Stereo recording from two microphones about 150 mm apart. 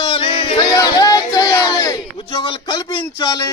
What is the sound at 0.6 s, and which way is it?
Speech, 25° left (ahead or behind).